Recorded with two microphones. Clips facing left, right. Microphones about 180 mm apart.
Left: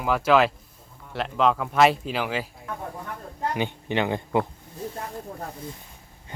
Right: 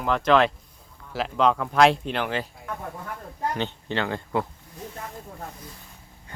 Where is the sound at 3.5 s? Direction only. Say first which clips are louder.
Left 6 dB; 15° left (ahead or behind).